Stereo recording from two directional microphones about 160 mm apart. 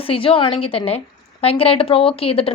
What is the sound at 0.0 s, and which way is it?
A woman's voice, 35° left (ahead or behind).